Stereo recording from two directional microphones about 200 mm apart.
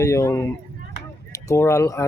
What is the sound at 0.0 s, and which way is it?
Speech, 15° left (ahead or behind).